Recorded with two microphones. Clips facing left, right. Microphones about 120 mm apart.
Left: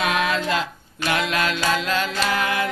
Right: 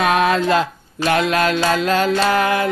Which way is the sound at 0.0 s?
45° right (ahead or behind).